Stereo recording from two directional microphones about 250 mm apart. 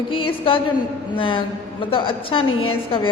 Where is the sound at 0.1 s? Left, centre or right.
Left.